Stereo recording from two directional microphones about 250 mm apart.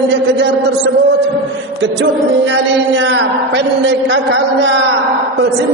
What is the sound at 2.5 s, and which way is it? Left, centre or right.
A man's voice, right.